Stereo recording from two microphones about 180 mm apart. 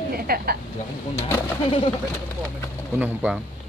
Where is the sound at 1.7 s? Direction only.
30° left (ahead or behind).